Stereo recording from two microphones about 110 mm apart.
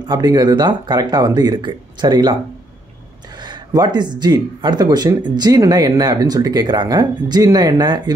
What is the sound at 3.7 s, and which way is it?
Speech, 40° right (ahead or behind).